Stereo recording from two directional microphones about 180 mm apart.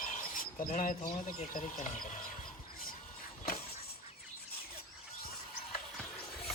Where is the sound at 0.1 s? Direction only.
45° left (ahead or behind).